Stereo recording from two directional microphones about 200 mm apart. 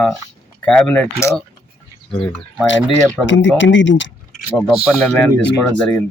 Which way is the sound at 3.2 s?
65° left (ahead or behind).